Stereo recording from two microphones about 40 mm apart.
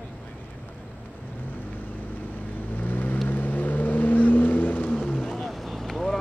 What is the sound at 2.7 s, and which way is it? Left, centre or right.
Vehicle, left.